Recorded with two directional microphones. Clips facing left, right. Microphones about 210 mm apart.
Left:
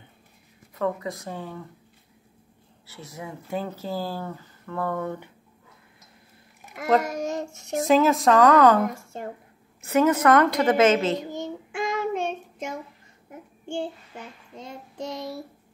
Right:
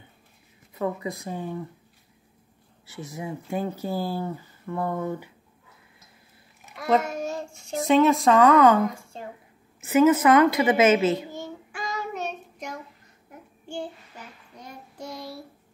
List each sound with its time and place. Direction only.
0.7 s speech: 15° right (ahead or behind)
2.9 s speech: 15° right (ahead or behind)
6.9 s speech: centre (ahead or behind)
11.3 s child singing: 20° left (ahead or behind)